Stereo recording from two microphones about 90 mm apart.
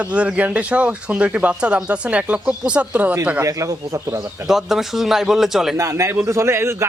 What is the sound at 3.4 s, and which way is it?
Speech, 35° right (ahead or behind).